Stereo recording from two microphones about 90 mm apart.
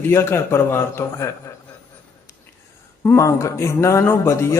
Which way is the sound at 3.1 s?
35° left (ahead or behind).